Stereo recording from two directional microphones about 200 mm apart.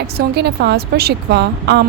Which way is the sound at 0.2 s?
55° right (ahead or behind).